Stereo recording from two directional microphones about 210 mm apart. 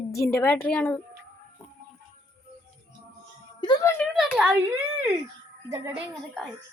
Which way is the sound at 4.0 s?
5° right (ahead or behind).